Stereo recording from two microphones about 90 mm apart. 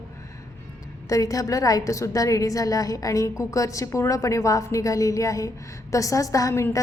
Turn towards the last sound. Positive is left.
turn(degrees=40)  # may be behind; listen again after turning